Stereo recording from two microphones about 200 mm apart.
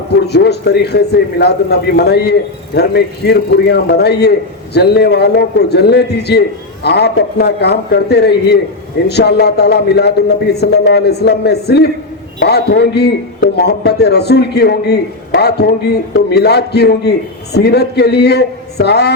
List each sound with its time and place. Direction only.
0.3 s a man's voice: 55° left (ahead or behind)